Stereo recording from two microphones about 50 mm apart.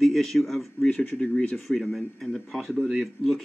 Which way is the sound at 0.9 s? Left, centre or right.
Left.